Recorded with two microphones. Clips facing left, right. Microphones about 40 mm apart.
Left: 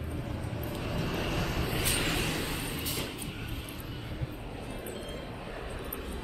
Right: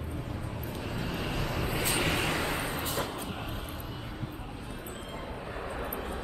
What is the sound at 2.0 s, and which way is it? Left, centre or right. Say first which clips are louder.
Vehicle: right 3 dB; right.